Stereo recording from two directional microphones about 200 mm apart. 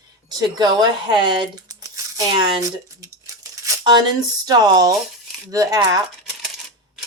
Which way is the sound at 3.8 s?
20° right (ahead or behind).